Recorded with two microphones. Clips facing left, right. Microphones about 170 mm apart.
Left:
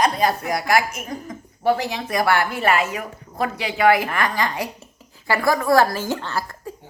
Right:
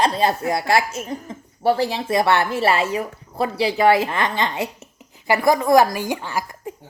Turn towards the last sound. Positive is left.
turn(degrees=-15)  # may be behind; listen again after turning